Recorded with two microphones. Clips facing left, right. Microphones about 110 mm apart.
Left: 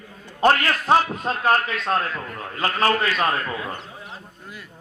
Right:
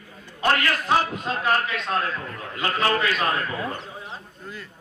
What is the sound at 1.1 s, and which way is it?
A man's voice, 40° left (ahead or behind).